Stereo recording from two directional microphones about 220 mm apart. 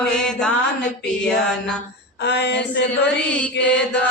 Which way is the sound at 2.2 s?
50° left (ahead or behind).